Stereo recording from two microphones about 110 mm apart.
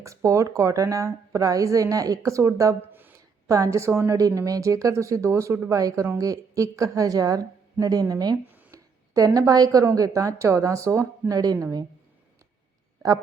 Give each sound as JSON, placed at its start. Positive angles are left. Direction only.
{"t": 0.0, "sound": "speech", "side_deg": -30}